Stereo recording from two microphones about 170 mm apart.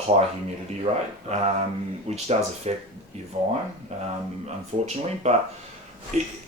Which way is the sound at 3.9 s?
40° right (ahead or behind).